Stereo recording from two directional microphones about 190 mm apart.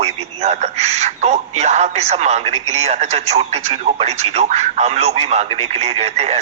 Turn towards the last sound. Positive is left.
turn(degrees=-35)  # may be behind; listen again after turning